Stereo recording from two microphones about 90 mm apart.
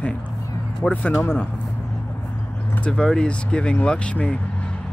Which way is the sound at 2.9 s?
5° left (ahead or behind).